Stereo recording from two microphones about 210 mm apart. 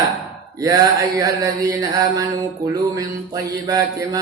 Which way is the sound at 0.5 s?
15° right (ahead or behind).